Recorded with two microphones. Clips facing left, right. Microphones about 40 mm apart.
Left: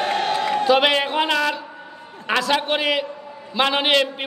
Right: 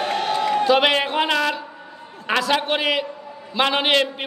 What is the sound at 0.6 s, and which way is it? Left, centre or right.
A man's voice, centre.